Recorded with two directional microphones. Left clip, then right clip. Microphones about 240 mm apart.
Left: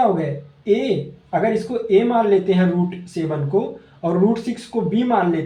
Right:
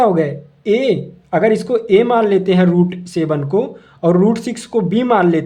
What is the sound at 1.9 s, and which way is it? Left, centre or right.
Speech, right.